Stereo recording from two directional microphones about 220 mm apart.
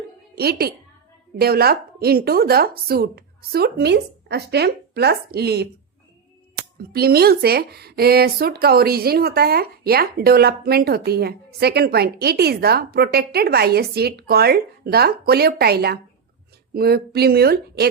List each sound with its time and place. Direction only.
0.3 s speech: 45° right (ahead or behind)